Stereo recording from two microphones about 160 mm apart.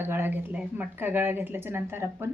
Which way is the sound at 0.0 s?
15° right (ahead or behind).